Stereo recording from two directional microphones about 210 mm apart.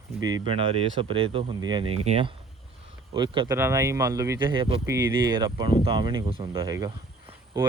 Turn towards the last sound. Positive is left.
turn(degrees=-15)  # may be behind; listen again after turning